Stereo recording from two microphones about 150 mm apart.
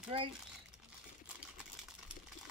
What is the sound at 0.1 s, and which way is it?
Speech, 40° right (ahead or behind).